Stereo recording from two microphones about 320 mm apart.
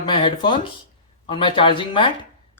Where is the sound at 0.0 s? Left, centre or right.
Centre.